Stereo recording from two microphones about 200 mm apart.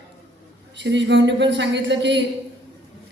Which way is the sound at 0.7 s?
60° right (ahead or behind).